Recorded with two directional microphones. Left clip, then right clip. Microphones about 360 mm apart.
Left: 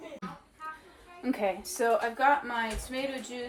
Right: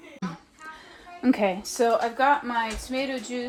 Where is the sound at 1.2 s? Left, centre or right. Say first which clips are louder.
Right 7 dB; right.